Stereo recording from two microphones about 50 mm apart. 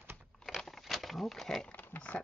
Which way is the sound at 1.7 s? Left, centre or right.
Left.